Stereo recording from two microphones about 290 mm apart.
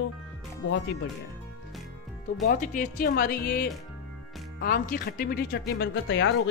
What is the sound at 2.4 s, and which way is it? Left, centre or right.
Speech, left.